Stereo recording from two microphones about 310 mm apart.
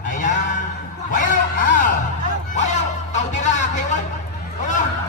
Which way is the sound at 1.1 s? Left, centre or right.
Left.